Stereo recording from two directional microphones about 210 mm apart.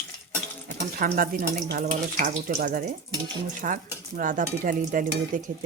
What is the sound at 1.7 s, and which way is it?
Stir, 35° right (ahead or behind).